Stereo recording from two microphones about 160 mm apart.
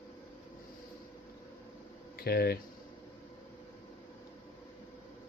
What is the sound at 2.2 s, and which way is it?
Speech, 70° left (ahead or behind).